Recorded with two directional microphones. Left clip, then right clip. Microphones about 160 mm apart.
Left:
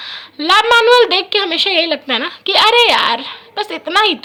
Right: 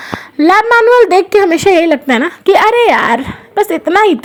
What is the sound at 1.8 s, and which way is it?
A woman's voice, 35° right (ahead or behind).